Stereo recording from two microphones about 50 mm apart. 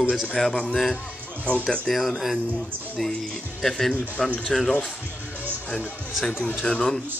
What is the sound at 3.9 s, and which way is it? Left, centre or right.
Speech, left.